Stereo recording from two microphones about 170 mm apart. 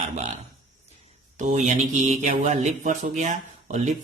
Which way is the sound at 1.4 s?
45° right (ahead or behind).